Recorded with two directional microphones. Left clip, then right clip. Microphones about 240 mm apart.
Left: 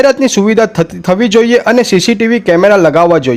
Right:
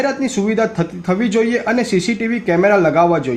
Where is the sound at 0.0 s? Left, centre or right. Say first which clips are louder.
Left 10 dB; left.